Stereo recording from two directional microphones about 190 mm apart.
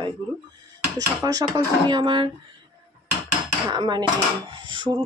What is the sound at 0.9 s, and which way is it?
Speech, 20° right (ahead or behind).